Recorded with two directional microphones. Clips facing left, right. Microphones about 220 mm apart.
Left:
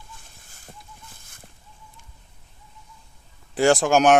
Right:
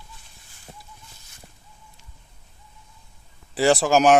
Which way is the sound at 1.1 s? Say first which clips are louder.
Left 2 dB; 50° left (ahead or behind).